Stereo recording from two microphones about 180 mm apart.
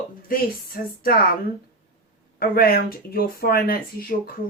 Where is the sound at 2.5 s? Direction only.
55° left (ahead or behind).